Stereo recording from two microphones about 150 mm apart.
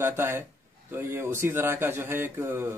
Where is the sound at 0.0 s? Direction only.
15° right (ahead or behind).